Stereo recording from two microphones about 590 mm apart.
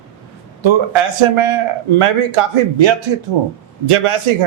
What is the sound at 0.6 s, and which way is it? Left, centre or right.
A man's voice, right.